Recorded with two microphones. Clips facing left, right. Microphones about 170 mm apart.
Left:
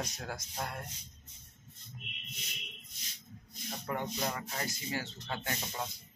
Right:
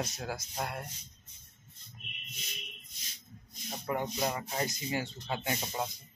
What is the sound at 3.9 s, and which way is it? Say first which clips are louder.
Speech: right 3 dB; 10° right (ahead or behind).